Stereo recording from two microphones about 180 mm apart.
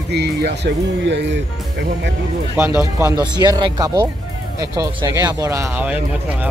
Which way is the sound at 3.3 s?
20° right (ahead or behind).